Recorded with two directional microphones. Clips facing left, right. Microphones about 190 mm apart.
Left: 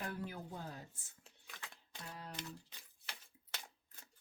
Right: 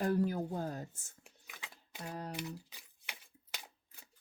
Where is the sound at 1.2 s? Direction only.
15° right (ahead or behind).